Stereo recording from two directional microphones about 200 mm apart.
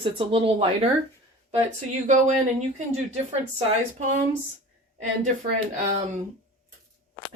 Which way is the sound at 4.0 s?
40° right (ahead or behind).